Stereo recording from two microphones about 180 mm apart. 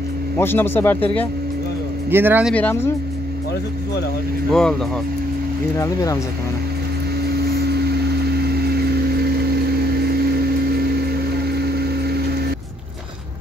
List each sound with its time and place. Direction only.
0.4 s speech: 10° left (ahead or behind)
2.0 s speech: 10° right (ahead or behind)
2.5 s speech: 10° left (ahead or behind)
4.5 s speech: 5° left (ahead or behind)
8.5 s vehicle: 60° right (ahead or behind)
11.5 s vehicle: 60° right (ahead or behind)